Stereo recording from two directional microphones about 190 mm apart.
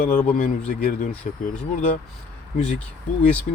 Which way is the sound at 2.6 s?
5° left (ahead or behind).